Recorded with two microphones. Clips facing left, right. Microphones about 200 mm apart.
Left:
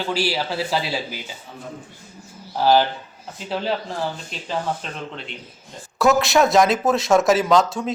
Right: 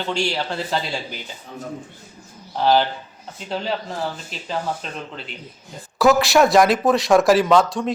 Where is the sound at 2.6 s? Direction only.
5° left (ahead or behind).